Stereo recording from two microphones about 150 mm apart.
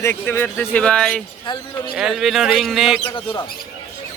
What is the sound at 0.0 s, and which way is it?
Speech, 15° left (ahead or behind).